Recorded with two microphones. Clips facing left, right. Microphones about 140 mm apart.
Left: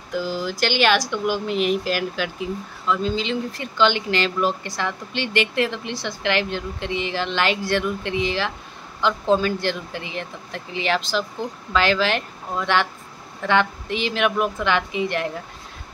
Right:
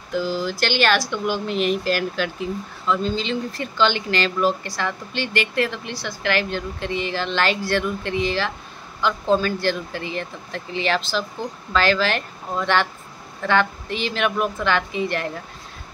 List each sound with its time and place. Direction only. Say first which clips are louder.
0.1 s speech: right 2 dB; 15° left (ahead or behind)